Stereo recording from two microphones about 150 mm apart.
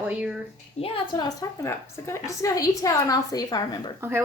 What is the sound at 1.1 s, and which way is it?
A woman's voice, 25° left (ahead or behind).